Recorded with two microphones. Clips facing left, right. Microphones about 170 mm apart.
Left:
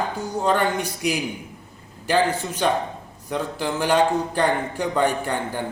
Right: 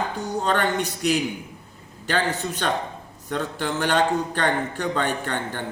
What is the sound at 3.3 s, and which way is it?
A man's voice, 10° left (ahead or behind).